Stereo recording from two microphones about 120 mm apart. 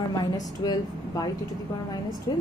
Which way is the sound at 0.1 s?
30° left (ahead or behind).